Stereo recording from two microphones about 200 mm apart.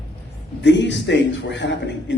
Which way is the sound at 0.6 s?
60° left (ahead or behind).